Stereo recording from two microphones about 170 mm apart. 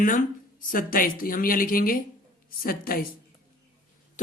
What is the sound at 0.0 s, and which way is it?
A woman's voice, 50° left (ahead or behind).